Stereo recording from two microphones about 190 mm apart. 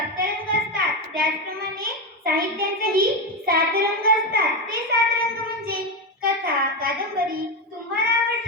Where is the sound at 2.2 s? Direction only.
55° right (ahead or behind).